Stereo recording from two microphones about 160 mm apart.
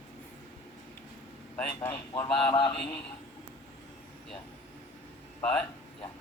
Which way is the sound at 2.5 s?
30° left (ahead or behind).